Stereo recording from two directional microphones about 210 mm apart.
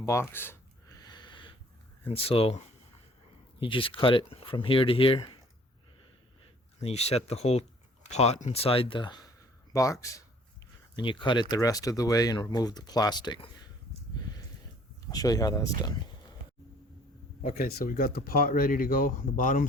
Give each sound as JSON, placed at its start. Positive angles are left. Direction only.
{"t": 0.0, "sound": "speech", "side_deg": 15}
{"t": 1.0, "sound": "a sound", "side_deg": 20}
{"t": 2.0, "sound": "speech", "side_deg": 25}
{"t": 3.6, "sound": "speech", "side_deg": 25}
{"t": 6.7, "sound": "speech", "side_deg": 30}
{"t": 15.0, "sound": "speech", "side_deg": 15}
{"t": 17.4, "sound": "speech", "side_deg": 40}